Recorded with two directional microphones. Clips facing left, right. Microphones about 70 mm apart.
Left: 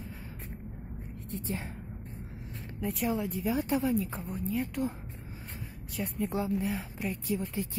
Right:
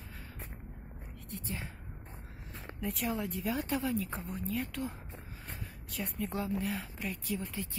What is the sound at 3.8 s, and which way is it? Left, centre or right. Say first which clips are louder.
Speech: left 5 dB; left.